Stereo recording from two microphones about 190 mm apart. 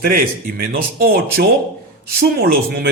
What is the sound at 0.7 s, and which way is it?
A man's voice, 50° right (ahead or behind).